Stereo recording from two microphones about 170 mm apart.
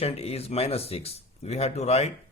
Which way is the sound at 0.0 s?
35° left (ahead or behind).